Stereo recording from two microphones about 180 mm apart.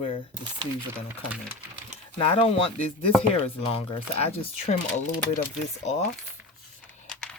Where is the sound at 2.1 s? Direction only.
30° left (ahead or behind).